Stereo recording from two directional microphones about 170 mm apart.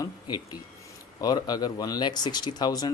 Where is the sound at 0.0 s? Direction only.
25° left (ahead or behind).